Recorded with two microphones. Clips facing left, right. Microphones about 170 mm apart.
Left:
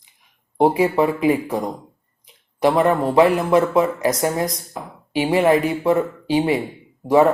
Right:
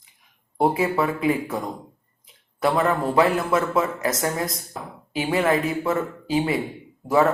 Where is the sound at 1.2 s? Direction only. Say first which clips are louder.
Left 4 dB; 20° left (ahead or behind).